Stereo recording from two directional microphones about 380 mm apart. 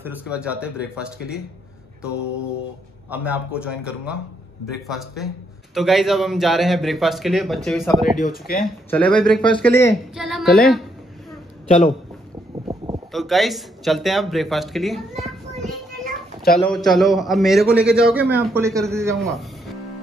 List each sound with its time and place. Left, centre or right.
0.0 s a man's voice: centre
3.1 s a man's voice: centre
8.2 s speech: left
8.9 s a man's voice: centre
11.6 s a man's voice: centre
12.6 s a sound: centre
13.1 s a man's voice: centre
15.1 s a sound: centre
16.5 s a man's voice: centre